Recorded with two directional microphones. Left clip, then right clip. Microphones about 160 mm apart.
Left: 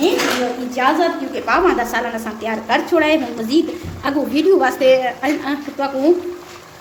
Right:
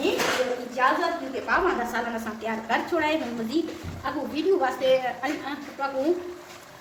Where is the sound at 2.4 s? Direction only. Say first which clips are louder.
Left 9 dB; 35° left (ahead or behind).